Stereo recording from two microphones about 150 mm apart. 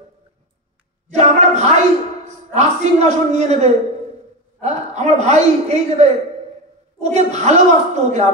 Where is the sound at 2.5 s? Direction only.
50° right (ahead or behind).